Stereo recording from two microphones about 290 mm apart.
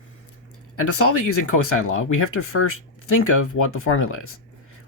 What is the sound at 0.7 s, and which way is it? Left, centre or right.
Speech, left.